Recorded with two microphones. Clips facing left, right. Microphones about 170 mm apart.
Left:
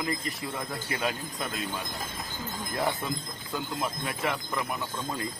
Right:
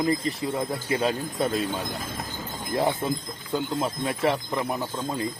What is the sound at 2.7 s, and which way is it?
Speech, 25° right (ahead or behind).